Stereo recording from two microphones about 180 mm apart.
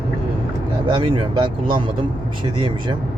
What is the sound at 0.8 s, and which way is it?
Speech, 30° right (ahead or behind).